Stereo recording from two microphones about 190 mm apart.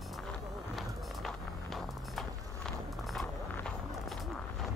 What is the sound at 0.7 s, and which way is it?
Vehicle, centre (ahead or behind).